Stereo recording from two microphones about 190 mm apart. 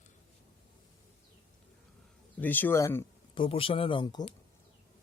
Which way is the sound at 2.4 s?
10° left (ahead or behind).